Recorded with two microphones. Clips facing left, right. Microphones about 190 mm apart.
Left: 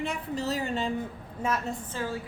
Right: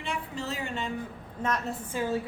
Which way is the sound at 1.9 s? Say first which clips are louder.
Right 7 dB; 20° right (ahead or behind).